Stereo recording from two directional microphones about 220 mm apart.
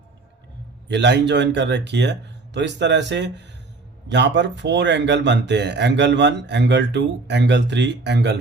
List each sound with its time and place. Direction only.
0.9 s speech: 50° right (ahead or behind)